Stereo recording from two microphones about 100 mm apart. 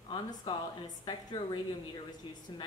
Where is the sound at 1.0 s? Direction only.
45° left (ahead or behind).